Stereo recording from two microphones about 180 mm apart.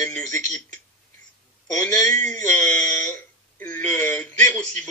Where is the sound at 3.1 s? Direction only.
15° left (ahead or behind).